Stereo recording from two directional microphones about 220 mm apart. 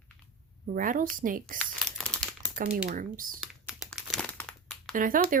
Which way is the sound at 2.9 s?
40° right (ahead or behind).